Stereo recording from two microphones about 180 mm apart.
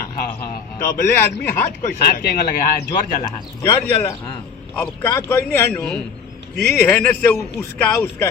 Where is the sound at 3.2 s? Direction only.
20° left (ahead or behind).